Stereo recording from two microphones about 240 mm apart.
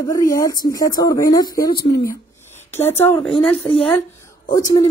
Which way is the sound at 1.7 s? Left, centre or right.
Left.